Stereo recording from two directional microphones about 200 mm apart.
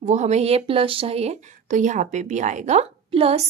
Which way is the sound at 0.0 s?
35° right (ahead or behind).